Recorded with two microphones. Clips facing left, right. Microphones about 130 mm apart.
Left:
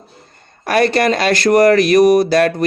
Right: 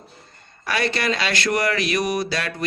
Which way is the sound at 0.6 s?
50° left (ahead or behind).